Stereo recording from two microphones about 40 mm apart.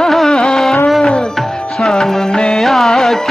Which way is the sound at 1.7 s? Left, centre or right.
Centre.